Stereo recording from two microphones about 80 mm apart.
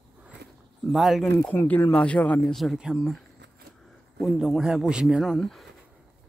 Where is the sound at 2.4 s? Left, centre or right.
Centre.